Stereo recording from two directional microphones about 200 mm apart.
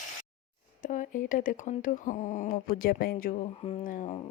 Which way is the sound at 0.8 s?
40° left (ahead or behind).